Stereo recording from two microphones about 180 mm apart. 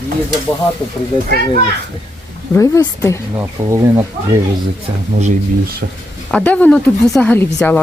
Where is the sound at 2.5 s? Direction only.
20° left (ahead or behind).